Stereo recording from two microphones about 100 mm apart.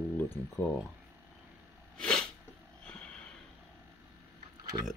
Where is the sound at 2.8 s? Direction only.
10° left (ahead or behind).